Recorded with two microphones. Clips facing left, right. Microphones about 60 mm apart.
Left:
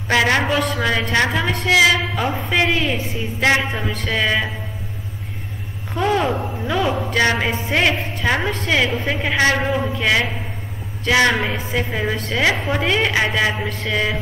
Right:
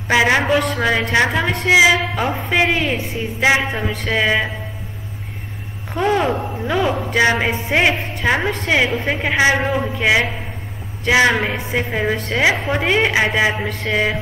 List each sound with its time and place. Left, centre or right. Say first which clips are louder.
0.1 s a woman's voice: right 2 dB; centre
1.5 s a woman's voice: right 2 dB; right
2.1 s a woman's voice: right 1 dB; centre
3.3 s a woman's voice: right 1 dB; centre
5.9 s a woman's voice: right 1 dB; centre
6.7 s a woman's voice: right 1 dB; centre
8.5 s a woman's voice: right 2 dB; right